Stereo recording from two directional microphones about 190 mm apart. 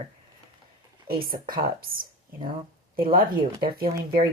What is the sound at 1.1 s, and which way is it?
Speech, 50° right (ahead or behind).